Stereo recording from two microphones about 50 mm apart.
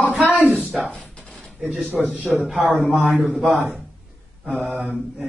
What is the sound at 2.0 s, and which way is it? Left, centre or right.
Speech, right.